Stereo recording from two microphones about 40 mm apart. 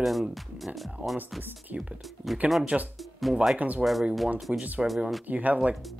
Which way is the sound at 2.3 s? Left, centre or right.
Centre.